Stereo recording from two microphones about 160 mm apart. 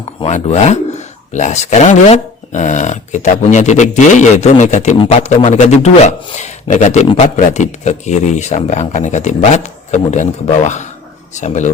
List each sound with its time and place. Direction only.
0.2 s speech: 45° left (ahead or behind)